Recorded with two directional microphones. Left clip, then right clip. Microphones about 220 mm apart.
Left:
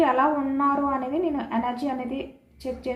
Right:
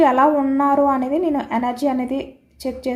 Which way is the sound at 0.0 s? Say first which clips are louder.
Right 7 dB; 55° right (ahead or behind).